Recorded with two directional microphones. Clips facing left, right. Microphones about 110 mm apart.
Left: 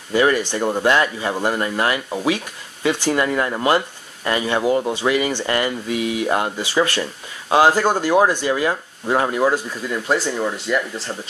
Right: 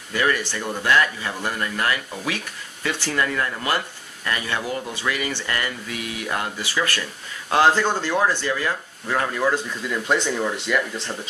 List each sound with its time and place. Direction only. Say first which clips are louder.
0.1 s speech: left 6 dB; 25° left (ahead or behind)
7.4 s speech: left 3 dB; 10° left (ahead or behind)